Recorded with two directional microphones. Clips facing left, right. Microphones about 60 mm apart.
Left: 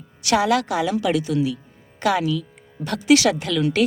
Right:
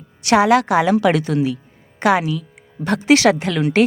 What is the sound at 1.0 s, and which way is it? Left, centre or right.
Speech, right.